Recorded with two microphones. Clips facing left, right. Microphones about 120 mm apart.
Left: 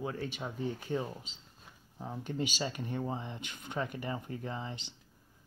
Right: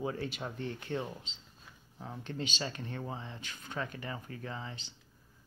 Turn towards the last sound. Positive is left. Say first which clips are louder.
# left 3 dB
turn(degrees=20)  # may be behind; listen again after turning